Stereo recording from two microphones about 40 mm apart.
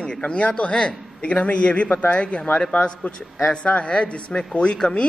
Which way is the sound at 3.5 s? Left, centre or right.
Left.